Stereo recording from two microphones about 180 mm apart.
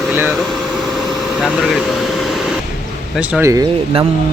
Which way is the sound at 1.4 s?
Centre (ahead or behind).